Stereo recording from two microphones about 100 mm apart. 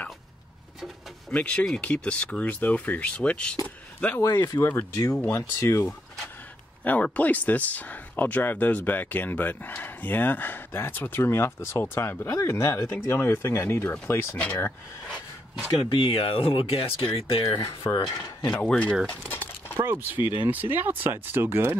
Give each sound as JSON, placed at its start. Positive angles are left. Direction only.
{"t": 1.3, "sound": "speech", "side_deg": 15}
{"t": 3.6, "sound": "a sound", "side_deg": 15}
{"t": 4.2, "sound": "speech", "side_deg": 40}
{"t": 4.6, "sound": "speech", "side_deg": 25}
{"t": 6.8, "sound": "speech", "side_deg": 15}
{"t": 14.4, "sound": "speech", "side_deg": 15}
{"t": 15.9, "sound": "speech", "side_deg": 65}
{"t": 18.5, "sound": "speech", "side_deg": 10}
{"t": 19.0, "sound": "a sound", "side_deg": 15}
{"t": 19.8, "sound": "speech", "side_deg": -25}